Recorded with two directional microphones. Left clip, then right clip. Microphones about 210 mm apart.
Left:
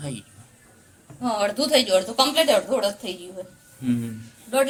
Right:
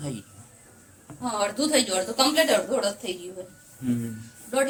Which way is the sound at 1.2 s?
30° left (ahead or behind).